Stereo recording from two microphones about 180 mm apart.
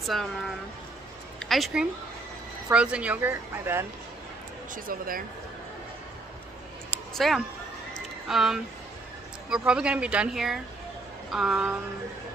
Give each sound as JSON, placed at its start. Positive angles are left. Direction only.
{"t": 0.0, "sound": "speech", "side_deg": 0}
{"t": 1.4, "sound": "a woman's voice", "side_deg": 0}
{"t": 4.7, "sound": "speech", "side_deg": -50}
{"t": 6.9, "sound": "a sound", "side_deg": 0}
{"t": 9.5, "sound": "speech", "side_deg": -5}